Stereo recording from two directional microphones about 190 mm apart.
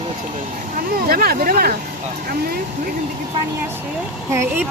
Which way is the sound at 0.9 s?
50° right (ahead or behind).